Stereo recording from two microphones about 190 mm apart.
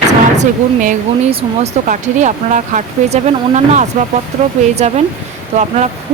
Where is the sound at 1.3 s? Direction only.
30° right (ahead or behind).